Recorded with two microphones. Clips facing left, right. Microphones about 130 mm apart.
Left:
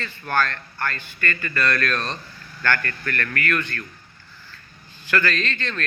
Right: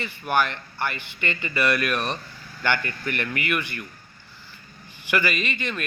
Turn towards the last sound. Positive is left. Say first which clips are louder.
# left 1 dB
turn(degrees=-10)  # may be behind; listen again after turning